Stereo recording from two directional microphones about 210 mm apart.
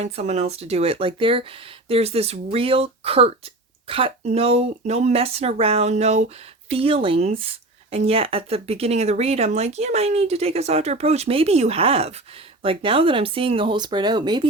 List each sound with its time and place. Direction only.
0.0 s speech: 30° right (ahead or behind)